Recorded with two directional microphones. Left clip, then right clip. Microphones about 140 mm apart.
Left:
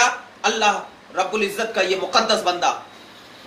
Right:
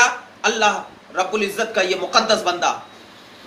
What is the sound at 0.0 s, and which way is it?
A man's voice, 5° right (ahead or behind).